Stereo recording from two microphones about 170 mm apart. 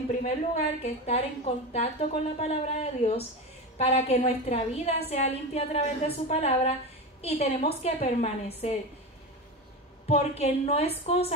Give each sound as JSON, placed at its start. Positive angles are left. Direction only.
{"t": 0.2, "sound": "a woman's voice", "side_deg": 40}
{"t": 10.0, "sound": "a woman's voice", "side_deg": 40}